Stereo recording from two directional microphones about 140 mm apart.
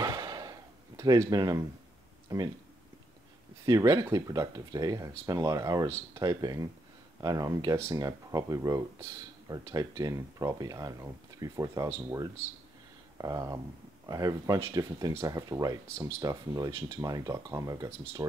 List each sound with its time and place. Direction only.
0.0 s a sound: 25° right (ahead or behind)
2.2 s speech: 25° right (ahead or behind)
3.6 s speech: 25° right (ahead or behind)